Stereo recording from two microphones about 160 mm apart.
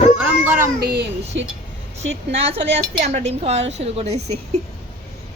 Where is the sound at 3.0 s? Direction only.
45° right (ahead or behind).